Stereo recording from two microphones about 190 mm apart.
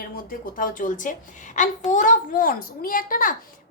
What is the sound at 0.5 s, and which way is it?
A child's voice, 45° left (ahead or behind).